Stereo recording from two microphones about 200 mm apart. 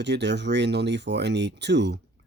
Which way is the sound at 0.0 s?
60° right (ahead or behind).